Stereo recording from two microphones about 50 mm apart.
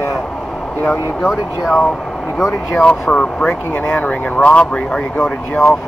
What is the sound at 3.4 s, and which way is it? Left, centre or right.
Speech, left.